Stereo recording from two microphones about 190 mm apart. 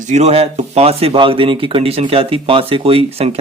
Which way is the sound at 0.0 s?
35° right (ahead or behind).